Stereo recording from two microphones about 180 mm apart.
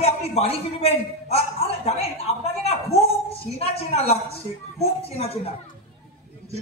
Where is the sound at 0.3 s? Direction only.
35° left (ahead or behind).